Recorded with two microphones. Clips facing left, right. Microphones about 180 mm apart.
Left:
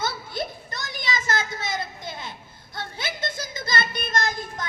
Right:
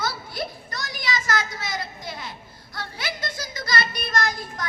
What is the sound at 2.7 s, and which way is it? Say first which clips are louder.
Child singing: even; 25° left (ahead or behind).